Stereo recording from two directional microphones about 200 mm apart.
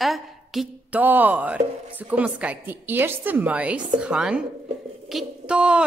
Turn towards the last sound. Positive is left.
turn(degrees=-5)  # may be behind; listen again after turning